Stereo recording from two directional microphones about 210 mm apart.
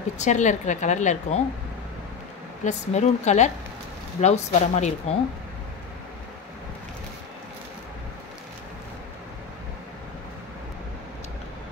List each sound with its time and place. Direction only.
0.2 s a woman's voice: 35° left (ahead or behind)
2.6 s a woman's voice: 35° left (ahead or behind)